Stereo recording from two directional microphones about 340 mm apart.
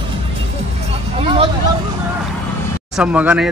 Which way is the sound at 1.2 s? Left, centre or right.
Centre.